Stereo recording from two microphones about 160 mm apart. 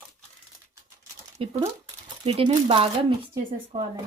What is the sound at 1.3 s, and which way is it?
Speech, 40° right (ahead or behind).